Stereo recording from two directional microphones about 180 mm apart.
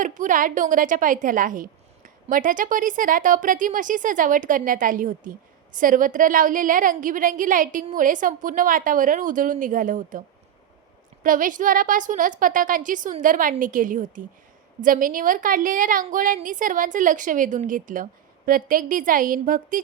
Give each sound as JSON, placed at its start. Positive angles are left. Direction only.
{"t": 0.0, "sound": "a woman's voice", "side_deg": -45}